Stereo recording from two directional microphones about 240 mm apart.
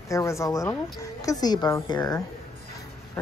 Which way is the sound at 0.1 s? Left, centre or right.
Centre.